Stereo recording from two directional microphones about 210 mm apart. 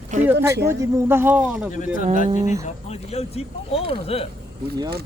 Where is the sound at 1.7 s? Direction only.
35° left (ahead or behind).